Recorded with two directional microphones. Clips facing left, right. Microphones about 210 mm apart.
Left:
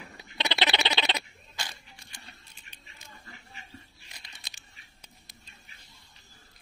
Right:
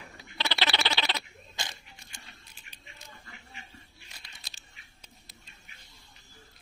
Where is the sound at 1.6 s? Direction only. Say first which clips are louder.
Even; 25° right (ahead or behind).